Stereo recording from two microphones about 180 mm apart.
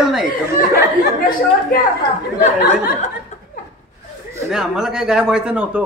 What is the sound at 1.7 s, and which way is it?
Speech, 50° left (ahead or behind).